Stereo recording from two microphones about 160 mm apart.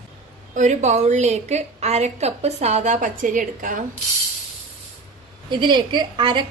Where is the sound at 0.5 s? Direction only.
50° right (ahead or behind).